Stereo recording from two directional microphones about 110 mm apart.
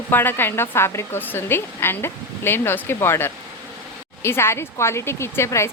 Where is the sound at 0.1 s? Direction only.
20° left (ahead or behind).